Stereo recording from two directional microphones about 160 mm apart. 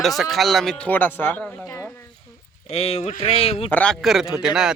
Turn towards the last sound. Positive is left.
turn(degrees=-5)  # may be behind; listen again after turning